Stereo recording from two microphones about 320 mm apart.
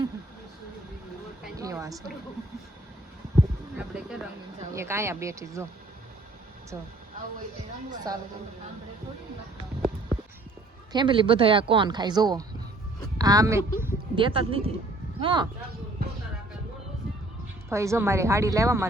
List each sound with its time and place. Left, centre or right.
1.5 s a sound: centre
3.8 s a sound: centre
4.7 s speech: centre
8.1 s speech: centre
10.9 s speech: centre
17.7 s speech: centre